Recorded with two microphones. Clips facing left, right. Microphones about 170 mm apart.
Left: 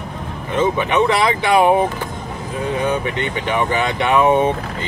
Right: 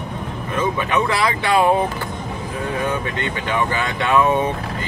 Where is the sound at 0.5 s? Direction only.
20° left (ahead or behind).